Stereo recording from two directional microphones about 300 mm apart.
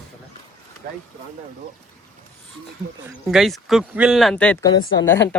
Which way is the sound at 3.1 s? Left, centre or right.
Centre.